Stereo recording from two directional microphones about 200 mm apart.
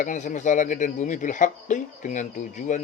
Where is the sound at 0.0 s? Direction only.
40° left (ahead or behind).